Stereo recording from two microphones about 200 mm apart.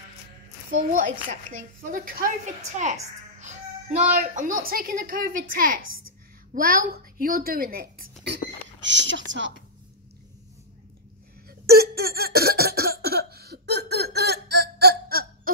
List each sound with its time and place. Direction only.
0.7 s a woman's voice: 40° right (ahead or behind)
8.8 s speech: 65° right (ahead or behind)
11.4 s cough: 50° right (ahead or behind)